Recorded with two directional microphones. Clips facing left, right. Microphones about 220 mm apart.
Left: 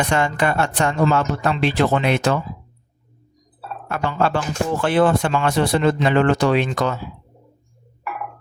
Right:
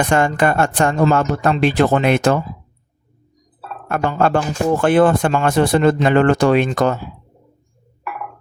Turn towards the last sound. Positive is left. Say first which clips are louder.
# right 4 dB
turn(degrees=-45)  # may be behind; listen again after turning